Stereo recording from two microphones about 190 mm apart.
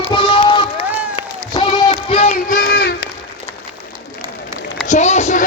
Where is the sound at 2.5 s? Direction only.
50° left (ahead or behind).